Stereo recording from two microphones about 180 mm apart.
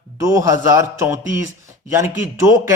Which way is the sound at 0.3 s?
15° right (ahead or behind).